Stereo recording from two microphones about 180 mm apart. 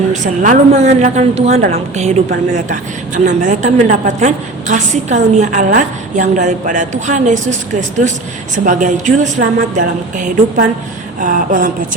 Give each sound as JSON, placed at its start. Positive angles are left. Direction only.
{"t": 0.1, "sound": "a woman's voice", "side_deg": -40}
{"t": 3.2, "sound": "a woman's voice", "side_deg": -40}